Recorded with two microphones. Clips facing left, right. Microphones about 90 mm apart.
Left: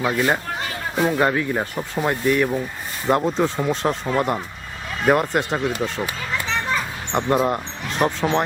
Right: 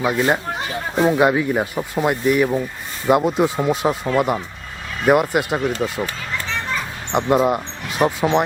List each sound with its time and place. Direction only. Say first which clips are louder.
0.0 s speech: right 2 dB; 15° right (ahead or behind)
7.1 s speech: right 3 dB; 5° right (ahead or behind)